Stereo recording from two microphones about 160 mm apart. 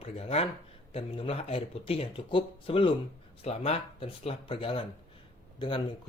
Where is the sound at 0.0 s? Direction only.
40° left (ahead or behind).